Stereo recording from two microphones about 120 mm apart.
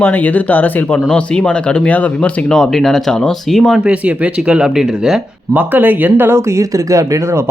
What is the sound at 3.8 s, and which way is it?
Speech, 10° right (ahead or behind).